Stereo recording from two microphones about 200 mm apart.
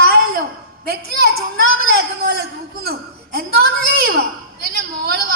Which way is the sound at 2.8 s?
50° right (ahead or behind).